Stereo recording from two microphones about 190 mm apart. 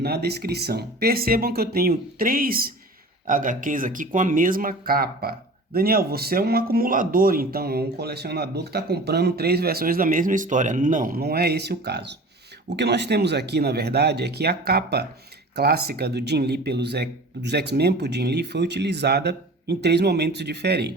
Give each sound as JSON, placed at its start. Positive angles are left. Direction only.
{"t": 0.0, "sound": "speech", "side_deg": -55}